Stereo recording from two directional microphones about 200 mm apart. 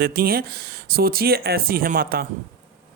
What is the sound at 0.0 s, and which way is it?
Speech, 45° right (ahead or behind).